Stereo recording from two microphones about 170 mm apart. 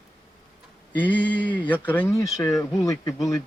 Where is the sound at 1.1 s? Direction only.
10° left (ahead or behind).